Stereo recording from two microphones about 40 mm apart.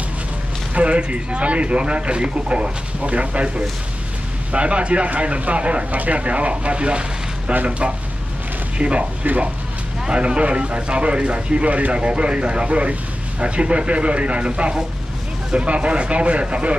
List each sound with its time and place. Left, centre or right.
0.7 s speech: right
10.0 s speech: right